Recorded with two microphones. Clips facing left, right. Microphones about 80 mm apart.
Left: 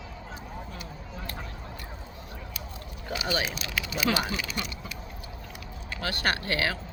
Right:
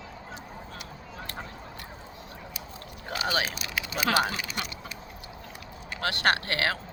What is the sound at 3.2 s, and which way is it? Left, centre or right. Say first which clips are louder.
Speech: right 1 dB; right.